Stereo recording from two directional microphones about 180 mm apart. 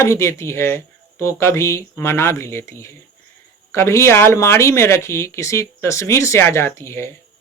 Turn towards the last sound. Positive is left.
turn(degrees=15)  # may be behind; listen again after turning